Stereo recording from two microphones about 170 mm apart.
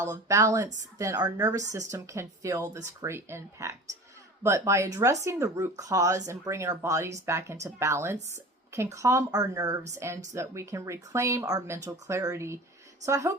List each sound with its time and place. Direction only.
0.1 s speech: 20° right (ahead or behind)